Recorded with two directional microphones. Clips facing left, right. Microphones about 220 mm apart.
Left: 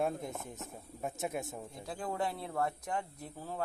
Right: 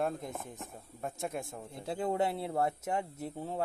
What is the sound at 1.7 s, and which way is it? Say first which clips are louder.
Speech: right 9 dB; 25° right (ahead or behind).